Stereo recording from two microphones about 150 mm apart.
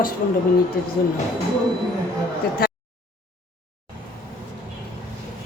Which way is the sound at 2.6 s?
90° left.